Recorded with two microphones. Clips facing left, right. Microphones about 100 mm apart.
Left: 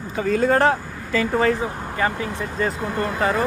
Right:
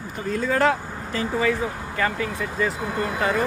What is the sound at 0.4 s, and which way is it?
Speech, 45° left (ahead or behind).